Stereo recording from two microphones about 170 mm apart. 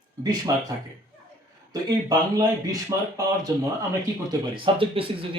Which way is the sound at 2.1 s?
20° right (ahead or behind).